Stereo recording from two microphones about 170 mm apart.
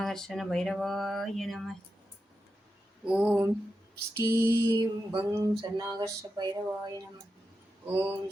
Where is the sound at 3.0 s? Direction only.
5° right (ahead or behind).